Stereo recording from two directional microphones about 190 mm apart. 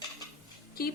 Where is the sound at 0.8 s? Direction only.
50° left (ahead or behind).